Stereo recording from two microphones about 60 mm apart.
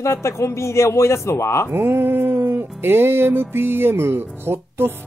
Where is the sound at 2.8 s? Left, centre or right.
Right.